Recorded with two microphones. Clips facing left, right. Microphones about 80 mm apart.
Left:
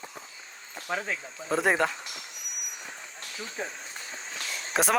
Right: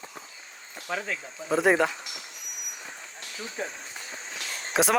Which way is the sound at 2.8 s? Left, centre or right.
Centre.